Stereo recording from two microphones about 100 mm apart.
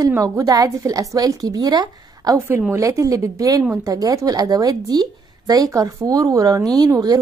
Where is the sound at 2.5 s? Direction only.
20° right (ahead or behind).